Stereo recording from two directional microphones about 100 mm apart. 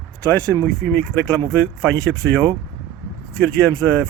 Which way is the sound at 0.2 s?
15° left (ahead or behind).